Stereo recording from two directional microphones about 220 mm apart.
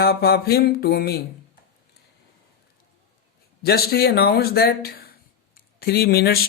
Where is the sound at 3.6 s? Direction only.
45° left (ahead or behind).